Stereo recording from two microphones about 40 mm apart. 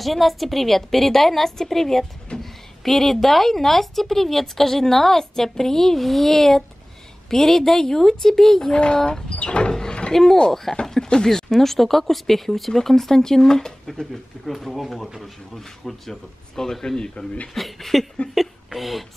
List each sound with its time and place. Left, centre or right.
0.0 s a woman's voice: centre
8.7 s a sound: left
10.1 s speech: centre
14.4 s a woman's voice: centre
17.6 s a woman's voice: centre